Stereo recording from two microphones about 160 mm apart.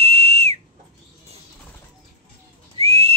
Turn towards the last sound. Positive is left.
turn(degrees=-40)  # may be behind; listen again after turning